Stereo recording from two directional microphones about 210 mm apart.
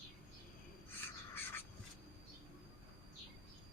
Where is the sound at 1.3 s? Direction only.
10° left (ahead or behind).